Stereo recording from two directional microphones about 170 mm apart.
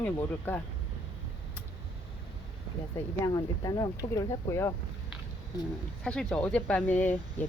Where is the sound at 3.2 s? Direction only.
20° left (ahead or behind).